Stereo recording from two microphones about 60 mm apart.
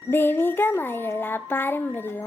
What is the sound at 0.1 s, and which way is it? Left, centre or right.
Speech, left.